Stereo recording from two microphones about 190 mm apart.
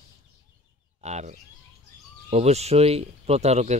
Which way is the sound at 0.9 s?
35° right (ahead or behind).